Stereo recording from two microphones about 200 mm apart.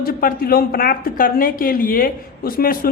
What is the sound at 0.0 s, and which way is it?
A woman's voice, 45° left (ahead or behind).